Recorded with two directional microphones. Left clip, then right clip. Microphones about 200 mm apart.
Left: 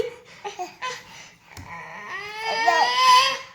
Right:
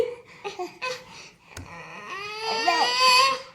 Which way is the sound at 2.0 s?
20° right (ahead or behind).